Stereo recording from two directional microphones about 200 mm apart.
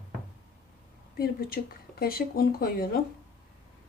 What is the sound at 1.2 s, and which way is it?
Speech, 50° left (ahead or behind).